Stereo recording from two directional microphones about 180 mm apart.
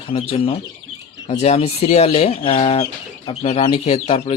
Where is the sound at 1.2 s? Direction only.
35° left (ahead or behind).